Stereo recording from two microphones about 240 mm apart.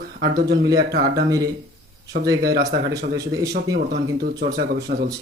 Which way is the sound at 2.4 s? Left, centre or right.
Right.